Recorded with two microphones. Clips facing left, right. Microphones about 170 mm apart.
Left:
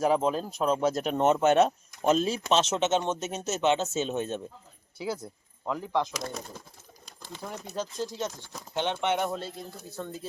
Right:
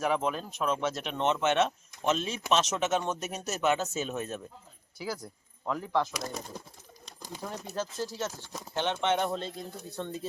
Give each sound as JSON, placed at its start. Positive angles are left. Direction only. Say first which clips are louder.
{"t": 0.0, "sound": "speech", "louder": "left 4 dB", "side_deg": 30}
{"t": 6.2, "sound": "speech", "louder": "left 1 dB", "side_deg": -15}
{"t": 7.4, "sound": "speech", "louder": "even", "side_deg": 0}
{"t": 7.7, "sound": "speech", "louder": "left 2 dB", "side_deg": 15}